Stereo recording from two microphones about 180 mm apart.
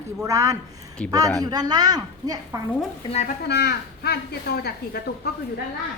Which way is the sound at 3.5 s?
65° left (ahead or behind).